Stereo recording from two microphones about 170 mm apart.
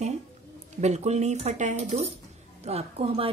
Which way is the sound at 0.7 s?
40° right (ahead or behind).